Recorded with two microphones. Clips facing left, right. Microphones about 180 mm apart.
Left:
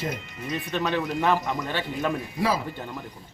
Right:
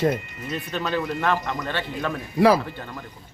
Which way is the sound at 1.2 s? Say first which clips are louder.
Even; 15° left (ahead or behind).